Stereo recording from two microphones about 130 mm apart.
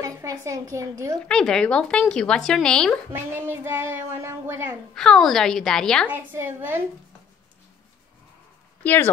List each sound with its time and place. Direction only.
0.0 s a woman's voice: 25° right (ahead or behind)
1.1 s speech: 5° left (ahead or behind)
3.1 s speech: 15° right (ahead or behind)
4.9 s speech: 5° left (ahead or behind)
6.0 s speech: 15° right (ahead or behind)
8.8 s speech: 15° left (ahead or behind)